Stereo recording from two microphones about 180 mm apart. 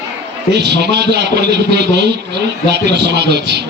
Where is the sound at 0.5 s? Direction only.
65° right (ahead or behind).